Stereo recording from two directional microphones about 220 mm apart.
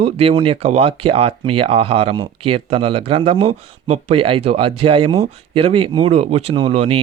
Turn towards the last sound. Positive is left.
turn(degrees=-25)  # may be behind; listen again after turning